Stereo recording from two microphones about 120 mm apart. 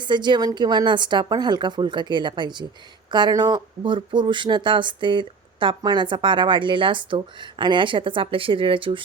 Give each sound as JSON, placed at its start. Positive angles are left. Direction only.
{"t": 0.0, "sound": "a woman's voice", "side_deg": -40}